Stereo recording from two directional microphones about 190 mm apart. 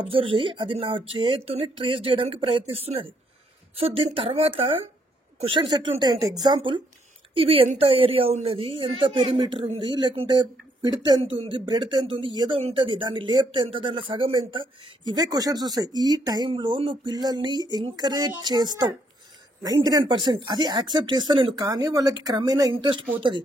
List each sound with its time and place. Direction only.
0.0 s speech: 30° right (ahead or behind)